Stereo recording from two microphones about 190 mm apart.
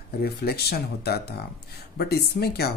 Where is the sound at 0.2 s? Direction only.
55° left (ahead or behind).